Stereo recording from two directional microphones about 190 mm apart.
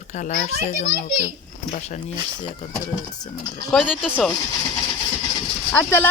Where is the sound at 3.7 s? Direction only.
Centre (ahead or behind).